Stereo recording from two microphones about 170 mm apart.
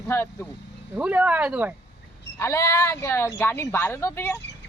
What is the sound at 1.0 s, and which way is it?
Speech, 10° right (ahead or behind).